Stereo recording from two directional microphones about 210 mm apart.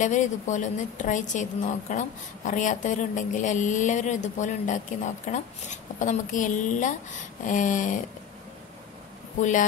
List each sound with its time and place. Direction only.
0.0 s a woman's voice: 35° left (ahead or behind)
9.4 s a woman's voice: 35° left (ahead or behind)